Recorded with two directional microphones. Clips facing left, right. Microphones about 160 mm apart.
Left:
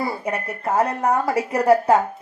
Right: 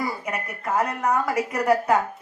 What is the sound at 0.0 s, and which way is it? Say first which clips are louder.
A woman's voice: left 4 dB; 30° left (ahead or behind).